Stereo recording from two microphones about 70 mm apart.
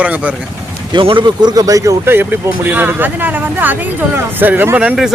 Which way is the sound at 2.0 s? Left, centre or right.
Right.